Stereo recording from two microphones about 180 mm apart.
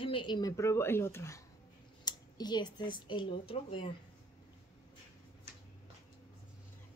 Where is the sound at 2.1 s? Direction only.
25° left (ahead or behind).